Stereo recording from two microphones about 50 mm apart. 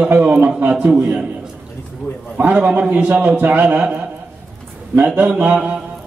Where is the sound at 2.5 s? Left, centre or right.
Right.